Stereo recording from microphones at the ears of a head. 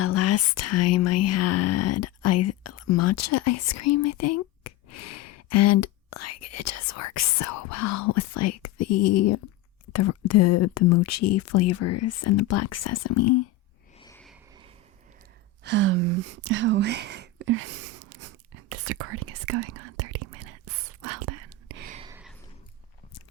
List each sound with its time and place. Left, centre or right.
0.0 s speech: left
15.6 s whispering: right